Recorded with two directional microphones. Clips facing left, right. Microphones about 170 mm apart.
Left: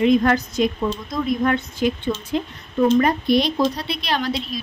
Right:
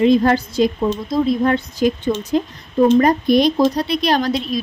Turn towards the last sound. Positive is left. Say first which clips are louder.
# right 6 dB
turn(degrees=-45)  # may be behind; listen again after turning